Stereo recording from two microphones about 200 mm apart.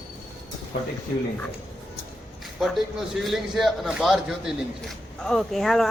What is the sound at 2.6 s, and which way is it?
A man's voice, centre (ahead or behind).